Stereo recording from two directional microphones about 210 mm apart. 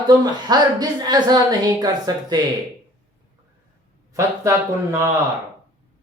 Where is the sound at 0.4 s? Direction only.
20° right (ahead or behind).